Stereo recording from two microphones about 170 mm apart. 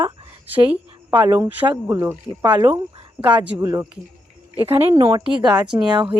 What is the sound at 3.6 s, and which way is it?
Speech, 20° right (ahead or behind).